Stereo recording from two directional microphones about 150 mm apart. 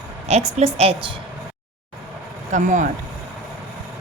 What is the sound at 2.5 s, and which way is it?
Speech, 55° right (ahead or behind).